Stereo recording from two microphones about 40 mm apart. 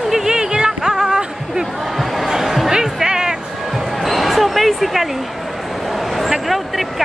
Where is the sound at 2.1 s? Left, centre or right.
Centre.